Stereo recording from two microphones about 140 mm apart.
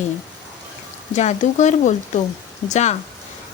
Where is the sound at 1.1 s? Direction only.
55° left (ahead or behind).